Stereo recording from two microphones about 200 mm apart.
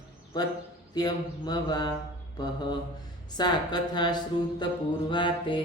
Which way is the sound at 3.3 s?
20° left (ahead or behind).